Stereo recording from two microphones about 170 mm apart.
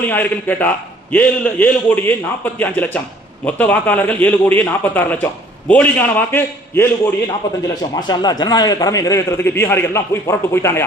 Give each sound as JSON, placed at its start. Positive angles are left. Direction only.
{"t": 0.1, "sound": "a man's voice", "side_deg": 10}
{"t": 7.8, "sound": "a man's voice", "side_deg": 25}